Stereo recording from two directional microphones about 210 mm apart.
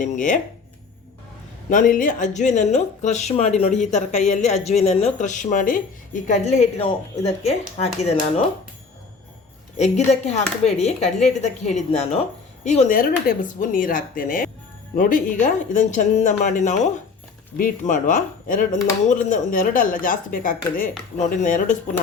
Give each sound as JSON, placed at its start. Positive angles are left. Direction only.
{"t": 0.0, "sound": "speech", "side_deg": 35}
{"t": 1.7, "sound": "speech", "side_deg": 40}
{"t": 9.7, "sound": "speech", "side_deg": 30}